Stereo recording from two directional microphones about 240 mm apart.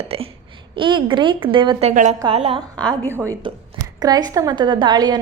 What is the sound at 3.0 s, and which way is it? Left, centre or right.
A woman's voice, centre.